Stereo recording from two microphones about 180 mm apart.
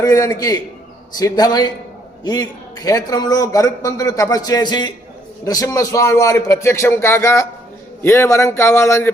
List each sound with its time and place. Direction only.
0.0 s a man's voice: 20° left (ahead or behind)